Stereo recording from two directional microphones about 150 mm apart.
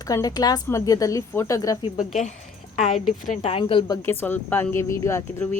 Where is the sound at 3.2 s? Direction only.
55° left (ahead or behind).